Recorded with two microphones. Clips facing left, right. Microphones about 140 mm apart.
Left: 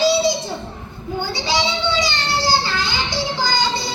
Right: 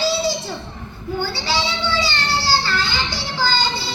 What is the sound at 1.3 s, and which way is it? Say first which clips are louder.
Children playing: left 2 dB; 15° left (ahead or behind).